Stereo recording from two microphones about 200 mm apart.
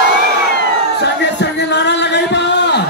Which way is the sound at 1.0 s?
60° left (ahead or behind).